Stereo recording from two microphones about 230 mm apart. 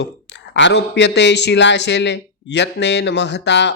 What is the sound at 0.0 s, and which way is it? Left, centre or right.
Speech, left.